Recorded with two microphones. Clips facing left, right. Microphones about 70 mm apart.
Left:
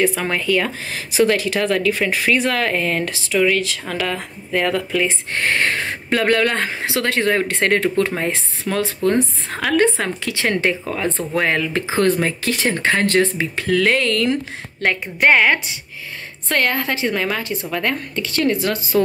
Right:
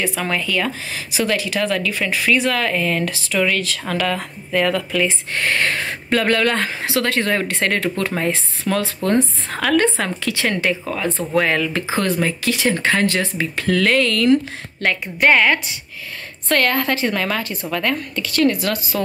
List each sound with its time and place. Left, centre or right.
0.0 s speech: left
6.0 s a woman's voice: centre
6.5 s speech: left
12.0 s speech: left
13.4 s speech: centre
13.9 s a woman's voice: left